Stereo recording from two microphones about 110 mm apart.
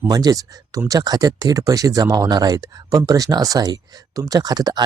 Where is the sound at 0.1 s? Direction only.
35° right (ahead or behind).